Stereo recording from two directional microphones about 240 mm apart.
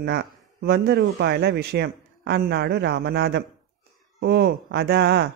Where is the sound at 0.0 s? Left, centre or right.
Right.